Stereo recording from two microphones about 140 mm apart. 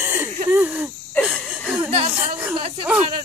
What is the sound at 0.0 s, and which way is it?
Wheeze, 15° right (ahead or behind).